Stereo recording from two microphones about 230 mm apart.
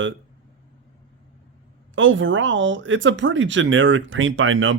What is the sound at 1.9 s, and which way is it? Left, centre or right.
Speech, right.